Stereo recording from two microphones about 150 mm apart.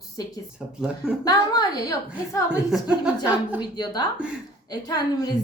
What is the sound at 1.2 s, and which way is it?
Speech, 25° left (ahead or behind).